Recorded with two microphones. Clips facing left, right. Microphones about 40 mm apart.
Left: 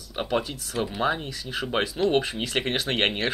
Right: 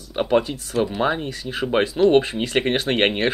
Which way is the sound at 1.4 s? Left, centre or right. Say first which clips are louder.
Right 7 dB; right.